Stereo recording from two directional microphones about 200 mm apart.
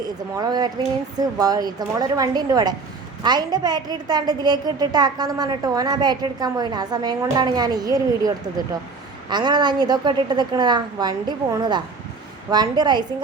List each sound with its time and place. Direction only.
0.3 s a woman's voice: 20° right (ahead or behind)